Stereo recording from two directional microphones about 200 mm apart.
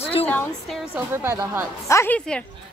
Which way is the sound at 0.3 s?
5° left (ahead or behind).